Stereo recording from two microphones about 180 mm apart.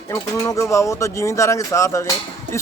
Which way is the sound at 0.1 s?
15° left (ahead or behind).